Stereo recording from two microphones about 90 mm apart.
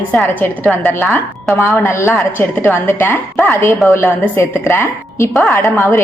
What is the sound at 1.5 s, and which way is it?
A woman's voice, 30° left (ahead or behind).